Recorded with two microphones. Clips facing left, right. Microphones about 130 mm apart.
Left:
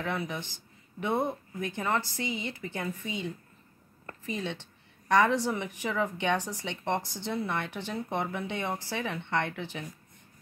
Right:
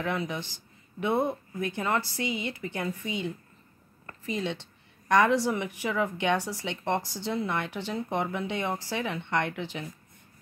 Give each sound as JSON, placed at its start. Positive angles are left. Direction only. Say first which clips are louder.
{"t": 0.0, "sound": "speech", "louder": "right 2 dB", "side_deg": -15}